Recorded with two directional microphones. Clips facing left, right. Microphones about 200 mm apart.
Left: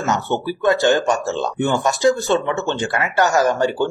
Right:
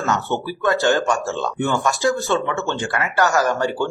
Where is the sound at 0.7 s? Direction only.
15° left (ahead or behind).